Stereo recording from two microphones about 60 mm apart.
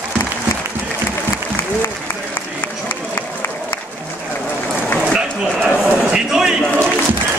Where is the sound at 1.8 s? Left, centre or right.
Left.